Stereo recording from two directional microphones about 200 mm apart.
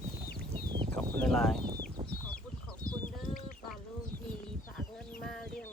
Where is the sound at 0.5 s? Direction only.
25° right (ahead or behind).